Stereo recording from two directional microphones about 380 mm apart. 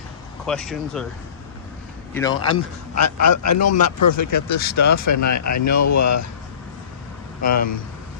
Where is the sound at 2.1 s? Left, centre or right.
Centre.